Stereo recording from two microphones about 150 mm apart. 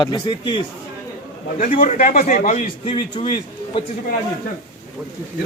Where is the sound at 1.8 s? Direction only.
60° left (ahead or behind).